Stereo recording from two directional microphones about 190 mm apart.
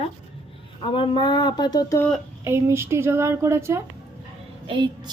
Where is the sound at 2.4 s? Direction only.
15° right (ahead or behind).